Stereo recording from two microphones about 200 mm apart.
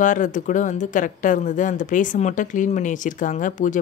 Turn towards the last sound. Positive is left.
turn(degrees=40)  # may be behind; listen again after turning